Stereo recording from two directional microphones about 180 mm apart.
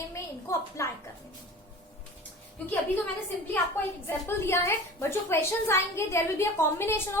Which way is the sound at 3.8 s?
10° left (ahead or behind).